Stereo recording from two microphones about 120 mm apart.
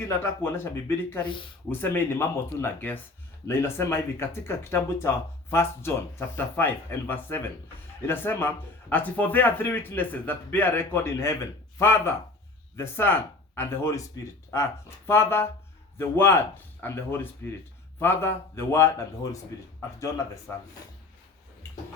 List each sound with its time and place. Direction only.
0.1 s speech: 20° left (ahead or behind)
1.2 s speech: 45° left (ahead or behind)
1.7 s speech: 20° left (ahead or behind)